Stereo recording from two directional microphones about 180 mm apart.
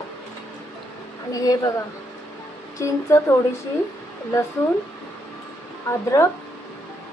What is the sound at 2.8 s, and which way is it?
Speech, 15° left (ahead or behind).